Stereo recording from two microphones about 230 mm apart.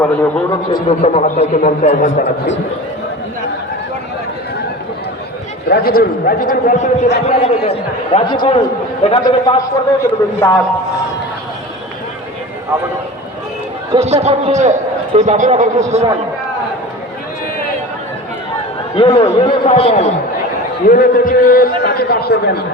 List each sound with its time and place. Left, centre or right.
0.0 s a man's voice: centre
0.7 s a man's voice: left
5.6 s a man's voice: left; by 10.5 s centre
13.9 s a man's voice: right
18.9 s a man's voice: left